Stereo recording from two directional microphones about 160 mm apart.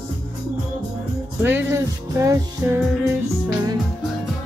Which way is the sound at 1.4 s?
15° right (ahead or behind).